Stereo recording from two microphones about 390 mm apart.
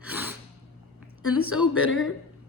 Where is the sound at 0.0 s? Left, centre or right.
Centre.